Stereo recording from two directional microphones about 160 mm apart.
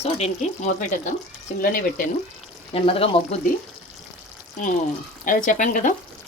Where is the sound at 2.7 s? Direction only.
35° left (ahead or behind).